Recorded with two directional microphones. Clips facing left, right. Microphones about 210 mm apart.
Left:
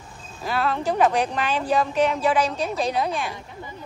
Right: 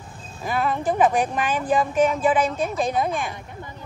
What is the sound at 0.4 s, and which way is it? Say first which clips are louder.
Speech: even; 15° right (ahead or behind).